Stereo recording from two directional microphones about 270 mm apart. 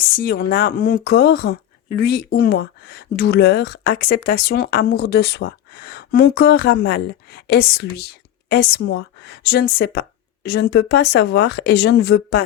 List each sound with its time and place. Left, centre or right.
0.2 s speech: left